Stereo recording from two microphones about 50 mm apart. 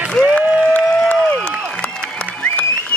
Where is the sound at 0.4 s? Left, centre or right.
Right.